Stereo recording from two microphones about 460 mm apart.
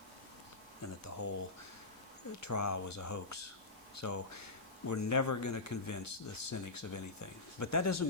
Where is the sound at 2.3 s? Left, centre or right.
Left.